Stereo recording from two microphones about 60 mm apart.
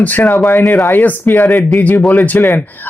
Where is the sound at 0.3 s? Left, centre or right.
Left.